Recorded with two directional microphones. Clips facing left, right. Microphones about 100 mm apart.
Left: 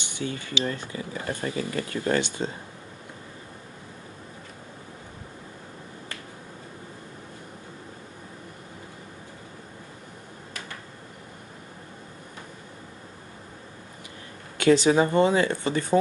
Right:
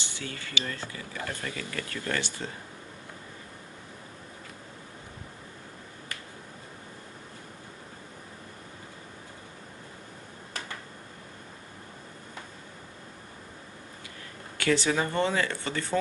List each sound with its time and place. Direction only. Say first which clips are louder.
0.0 s speech: left 7 dB; 20° left (ahead or behind)
14.6 s speech: left 7 dB; 20° left (ahead or behind)